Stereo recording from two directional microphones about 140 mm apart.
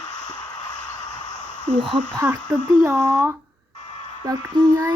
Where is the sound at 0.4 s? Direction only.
30° left (ahead or behind).